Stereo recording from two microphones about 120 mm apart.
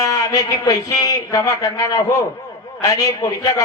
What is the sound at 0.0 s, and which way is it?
A man's voice, 30° left (ahead or behind).